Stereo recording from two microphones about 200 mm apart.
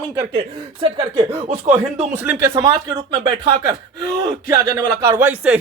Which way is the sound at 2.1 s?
5° right (ahead or behind).